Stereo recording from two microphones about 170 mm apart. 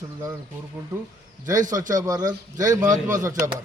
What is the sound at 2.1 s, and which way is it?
A man's voice, 20° right (ahead or behind).